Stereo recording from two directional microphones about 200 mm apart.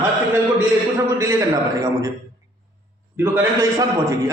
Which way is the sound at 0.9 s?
15° right (ahead or behind).